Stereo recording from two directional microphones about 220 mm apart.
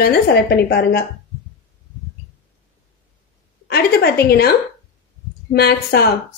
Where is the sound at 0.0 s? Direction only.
45° left (ahead or behind).